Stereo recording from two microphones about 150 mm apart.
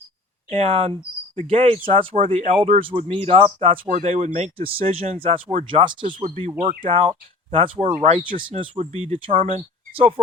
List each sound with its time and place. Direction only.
0.5 s speech: 45° right (ahead or behind)
3.8 s speech: 50° right (ahead or behind)